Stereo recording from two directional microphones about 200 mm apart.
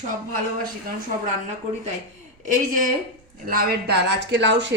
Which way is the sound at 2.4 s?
40° right (ahead or behind).